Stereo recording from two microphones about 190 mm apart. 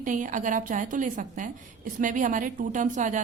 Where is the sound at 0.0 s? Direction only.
45° right (ahead or behind).